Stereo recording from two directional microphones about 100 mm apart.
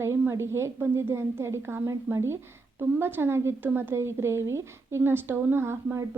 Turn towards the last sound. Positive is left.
turn(degrees=-25)  # may be behind; listen again after turning